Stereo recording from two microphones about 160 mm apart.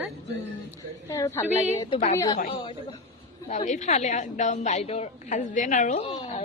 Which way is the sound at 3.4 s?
45° left (ahead or behind).